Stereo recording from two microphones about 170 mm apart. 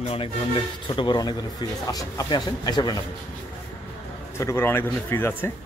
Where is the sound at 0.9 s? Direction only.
30° left (ahead or behind).